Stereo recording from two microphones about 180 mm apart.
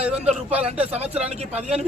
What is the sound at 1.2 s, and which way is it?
Speech, 35° right (ahead or behind).